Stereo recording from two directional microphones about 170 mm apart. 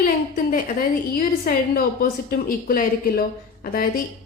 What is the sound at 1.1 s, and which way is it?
A woman's voice, 60° left (ahead or behind).